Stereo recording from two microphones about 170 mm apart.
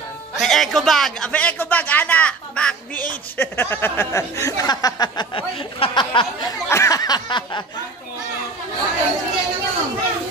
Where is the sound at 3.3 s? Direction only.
10° left (ahead or behind).